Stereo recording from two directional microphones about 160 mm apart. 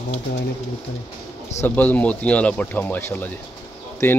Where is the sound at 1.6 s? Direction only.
10° left (ahead or behind).